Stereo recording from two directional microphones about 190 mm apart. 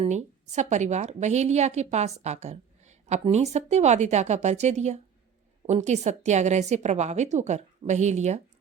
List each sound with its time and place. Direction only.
0.0 s a woman's voice: 40° right (ahead or behind)